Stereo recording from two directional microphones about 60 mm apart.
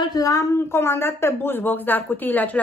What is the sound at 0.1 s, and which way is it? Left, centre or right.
Speech, left.